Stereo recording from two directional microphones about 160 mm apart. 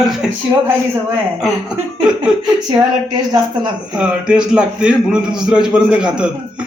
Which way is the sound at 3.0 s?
25° right (ahead or behind).